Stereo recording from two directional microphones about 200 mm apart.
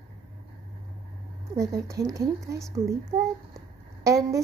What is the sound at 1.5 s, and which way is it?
A woman's voice, 15° right (ahead or behind).